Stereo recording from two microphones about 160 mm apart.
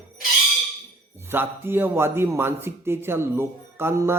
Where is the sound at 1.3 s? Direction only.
15° right (ahead or behind).